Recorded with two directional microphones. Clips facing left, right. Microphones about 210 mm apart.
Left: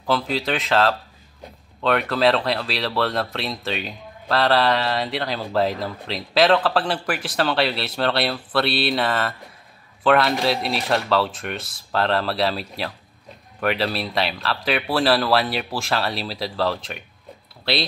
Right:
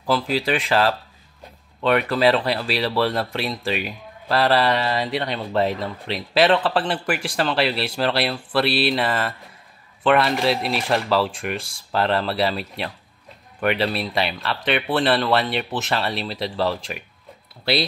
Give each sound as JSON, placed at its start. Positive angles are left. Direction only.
{"t": 0.0, "sound": "speech", "side_deg": -5}
{"t": 11.5, "sound": "speech", "side_deg": -30}
{"t": 11.9, "sound": "speech", "side_deg": 0}